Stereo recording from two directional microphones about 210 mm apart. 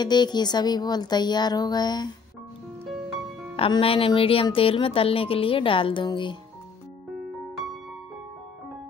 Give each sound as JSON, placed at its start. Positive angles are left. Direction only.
{"t": 0.0, "sound": "speech", "side_deg": 20}
{"t": 3.5, "sound": "speech", "side_deg": 25}